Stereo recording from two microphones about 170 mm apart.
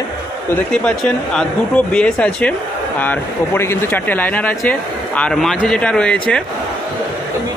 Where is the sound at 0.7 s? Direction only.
5° left (ahead or behind).